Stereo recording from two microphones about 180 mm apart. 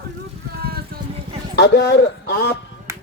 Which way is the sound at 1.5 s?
70° left (ahead or behind).